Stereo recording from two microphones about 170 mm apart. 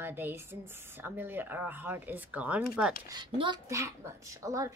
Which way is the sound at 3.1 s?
25° right (ahead or behind).